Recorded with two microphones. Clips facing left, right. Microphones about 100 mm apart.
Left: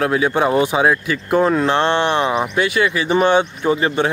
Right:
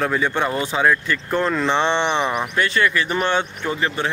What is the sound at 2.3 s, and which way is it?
Speech, 15° left (ahead or behind).